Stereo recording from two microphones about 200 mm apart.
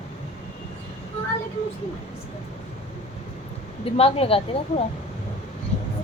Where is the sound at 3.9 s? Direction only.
30° left (ahead or behind).